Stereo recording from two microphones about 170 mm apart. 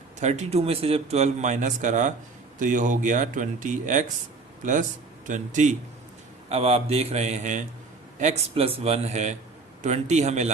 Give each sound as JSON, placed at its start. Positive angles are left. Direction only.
{"t": 0.2, "sound": "a man's voice", "side_deg": -40}
{"t": 6.5, "sound": "a man's voice", "side_deg": -35}